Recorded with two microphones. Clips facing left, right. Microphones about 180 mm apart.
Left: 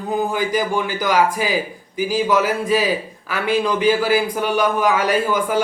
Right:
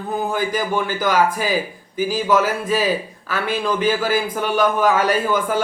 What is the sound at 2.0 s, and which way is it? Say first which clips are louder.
A man's voice: even; 15° left (ahead or behind).